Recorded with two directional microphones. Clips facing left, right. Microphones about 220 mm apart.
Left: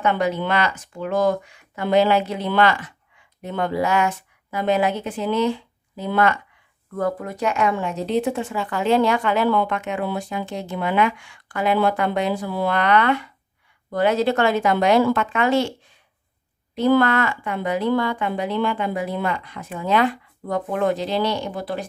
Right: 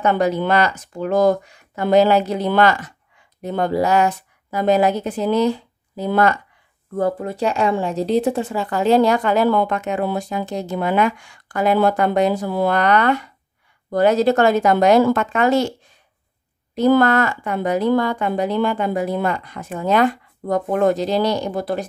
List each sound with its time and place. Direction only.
0.0 s a woman's voice: 40° right (ahead or behind)
7.0 s speech: 30° right (ahead or behind)
16.7 s a woman's voice: 40° right (ahead or behind)